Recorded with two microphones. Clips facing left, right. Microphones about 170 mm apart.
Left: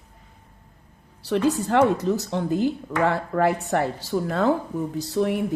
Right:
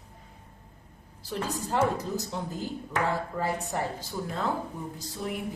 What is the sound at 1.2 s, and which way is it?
Speech, 80° left.